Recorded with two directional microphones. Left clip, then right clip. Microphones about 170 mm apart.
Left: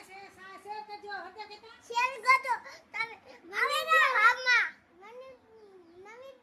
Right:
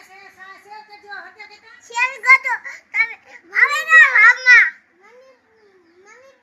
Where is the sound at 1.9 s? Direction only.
15° left (ahead or behind).